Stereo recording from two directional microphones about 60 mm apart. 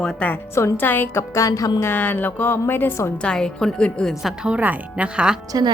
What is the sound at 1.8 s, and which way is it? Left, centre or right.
Speech, left.